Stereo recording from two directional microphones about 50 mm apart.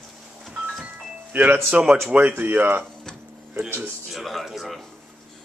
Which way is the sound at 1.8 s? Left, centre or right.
Right.